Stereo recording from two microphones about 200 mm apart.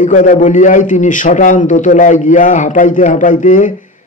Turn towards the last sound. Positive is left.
turn(degrees=40)  # may be behind; listen again after turning